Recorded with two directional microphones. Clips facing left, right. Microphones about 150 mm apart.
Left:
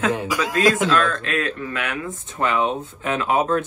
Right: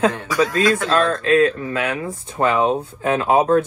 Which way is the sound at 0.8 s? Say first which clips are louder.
Right 3 dB; 35° right (ahead or behind).